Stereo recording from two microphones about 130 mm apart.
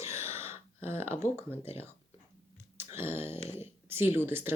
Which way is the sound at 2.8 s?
20° right (ahead or behind).